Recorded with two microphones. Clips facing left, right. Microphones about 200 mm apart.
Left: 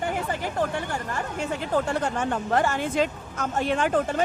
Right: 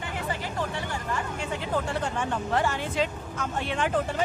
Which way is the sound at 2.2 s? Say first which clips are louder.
Left 2 dB; 45° left (ahead or behind).